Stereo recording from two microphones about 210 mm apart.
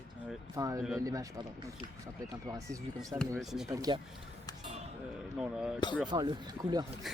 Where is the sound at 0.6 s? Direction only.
20° right (ahead or behind).